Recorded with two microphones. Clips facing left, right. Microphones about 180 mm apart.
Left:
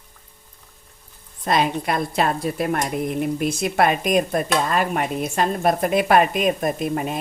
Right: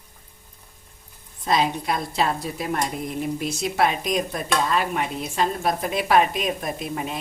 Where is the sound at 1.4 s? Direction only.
60° left (ahead or behind).